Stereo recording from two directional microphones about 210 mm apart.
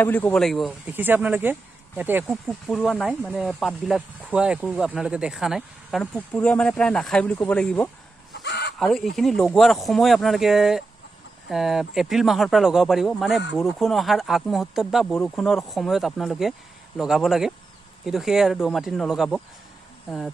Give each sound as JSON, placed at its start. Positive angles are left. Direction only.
{"t": 0.0, "sound": "speech", "side_deg": 10}
{"t": 8.3, "sound": "a sound", "side_deg": 55}
{"t": 8.7, "sound": "speech", "side_deg": 0}